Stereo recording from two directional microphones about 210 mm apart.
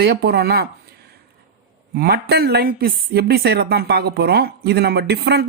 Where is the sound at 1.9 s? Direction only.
50° right (ahead or behind).